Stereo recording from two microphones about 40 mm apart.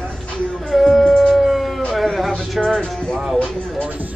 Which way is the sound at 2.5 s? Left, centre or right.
Centre.